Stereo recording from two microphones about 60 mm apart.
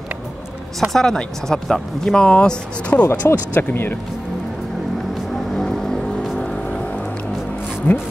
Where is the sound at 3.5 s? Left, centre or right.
Left.